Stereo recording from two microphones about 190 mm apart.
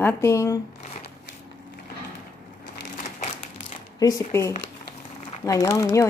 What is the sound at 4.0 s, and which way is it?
Speech, 15° left (ahead or behind).